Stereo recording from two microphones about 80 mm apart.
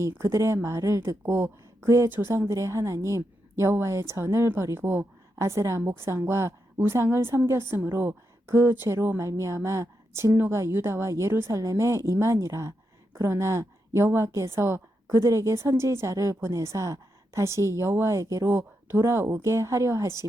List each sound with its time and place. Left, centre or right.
0.2 s a woman's voice: right
18.5 s a woman's voice: right